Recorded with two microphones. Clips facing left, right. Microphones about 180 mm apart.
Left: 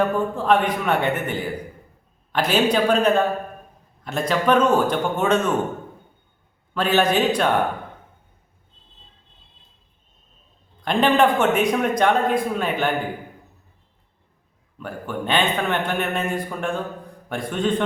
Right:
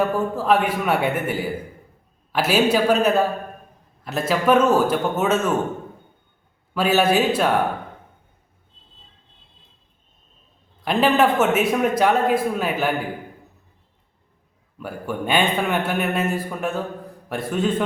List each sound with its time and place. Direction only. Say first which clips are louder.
0.0 s a man's voice: even; 5° right (ahead or behind)
6.7 s a man's voice: right 1 dB; 5° right (ahead or behind)
10.8 s speech: even; 5° right (ahead or behind)
14.8 s a man's voice: right 1 dB; 10° right (ahead or behind)